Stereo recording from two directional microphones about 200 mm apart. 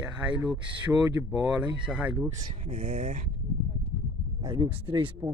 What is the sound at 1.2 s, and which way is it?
Speech, 15° right (ahead or behind).